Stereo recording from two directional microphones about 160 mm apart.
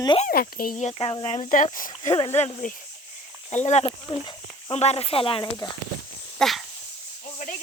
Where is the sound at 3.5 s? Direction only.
45° left (ahead or behind).